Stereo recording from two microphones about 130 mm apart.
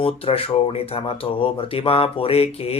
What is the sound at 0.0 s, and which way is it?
Speech, 45° left (ahead or behind).